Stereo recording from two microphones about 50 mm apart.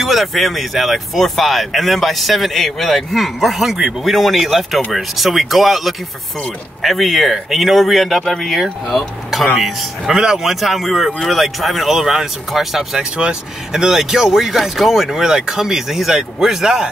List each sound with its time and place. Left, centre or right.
0.0 s speech: centre